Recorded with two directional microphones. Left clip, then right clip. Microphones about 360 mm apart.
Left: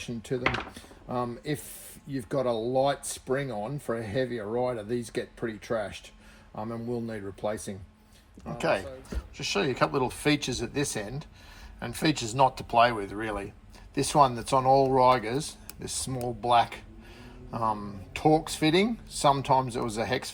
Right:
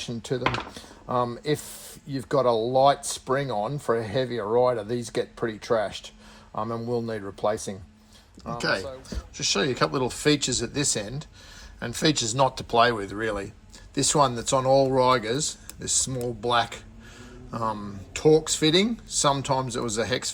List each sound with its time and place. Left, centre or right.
0.0 s speech: centre
8.5 s speech: centre